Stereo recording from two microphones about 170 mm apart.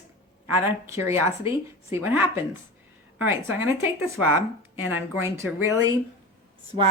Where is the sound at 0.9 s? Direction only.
15° right (ahead or behind).